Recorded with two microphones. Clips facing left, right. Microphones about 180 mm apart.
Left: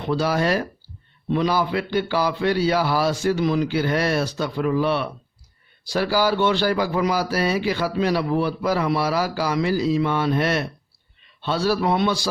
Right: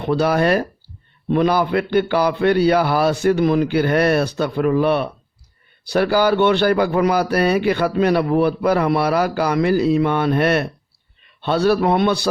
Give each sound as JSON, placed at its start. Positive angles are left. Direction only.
{"t": 0.0, "sound": "speech", "side_deg": -60}